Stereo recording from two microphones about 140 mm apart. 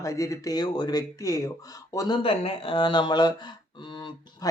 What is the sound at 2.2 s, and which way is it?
Speech, 40° left (ahead or behind).